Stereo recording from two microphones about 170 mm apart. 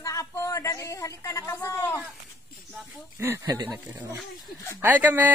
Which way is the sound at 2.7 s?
15° right (ahead or behind).